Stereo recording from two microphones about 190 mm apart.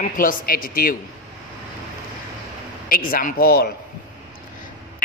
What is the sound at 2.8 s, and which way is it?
Speech, 50° left (ahead or behind).